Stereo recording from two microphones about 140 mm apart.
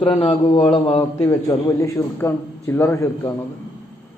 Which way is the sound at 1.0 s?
20° left (ahead or behind).